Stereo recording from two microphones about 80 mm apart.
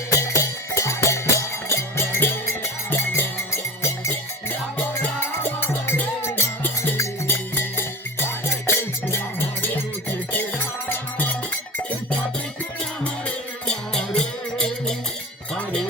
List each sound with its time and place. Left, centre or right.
0.1 s music: left
5.4 s music: left
10.8 s music: left
13.2 s music: centre